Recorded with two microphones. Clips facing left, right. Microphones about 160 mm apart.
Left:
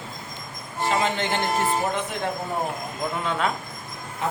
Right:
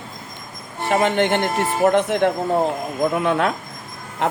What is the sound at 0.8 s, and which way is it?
Speech, 60° right (ahead or behind).